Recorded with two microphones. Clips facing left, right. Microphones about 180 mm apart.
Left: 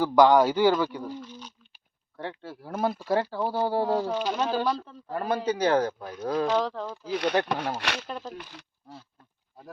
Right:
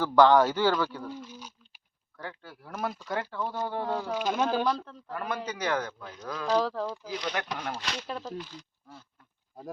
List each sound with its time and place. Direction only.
0.0 s speech: 15° left (ahead or behind)
1.3 s a sound: 10° right (ahead or behind)
2.1 s speech: 30° left (ahead or behind)
4.6 s speech: 5° left (ahead or behind)
5.1 s speech: 30° left (ahead or behind)
6.6 s speech: 5° right (ahead or behind)
7.1 s speech: 60° left (ahead or behind)
8.0 s speech: centre (ahead or behind)
8.5 s speech: 75° left (ahead or behind)